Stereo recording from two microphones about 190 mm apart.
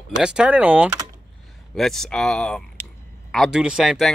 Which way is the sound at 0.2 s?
5° right (ahead or behind).